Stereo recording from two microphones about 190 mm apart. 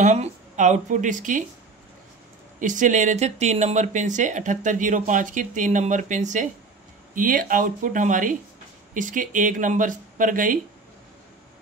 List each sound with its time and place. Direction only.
0.0 s speech: 35° right (ahead or behind)
2.6 s speech: 40° right (ahead or behind)